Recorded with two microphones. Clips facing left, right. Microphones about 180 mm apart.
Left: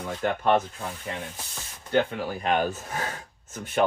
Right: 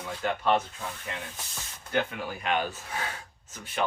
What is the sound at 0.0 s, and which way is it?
Speech, 50° left (ahead or behind).